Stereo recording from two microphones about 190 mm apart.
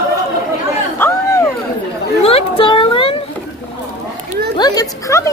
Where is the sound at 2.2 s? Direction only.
30° left (ahead or behind).